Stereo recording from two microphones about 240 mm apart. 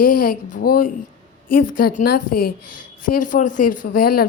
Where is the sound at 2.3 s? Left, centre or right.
Left.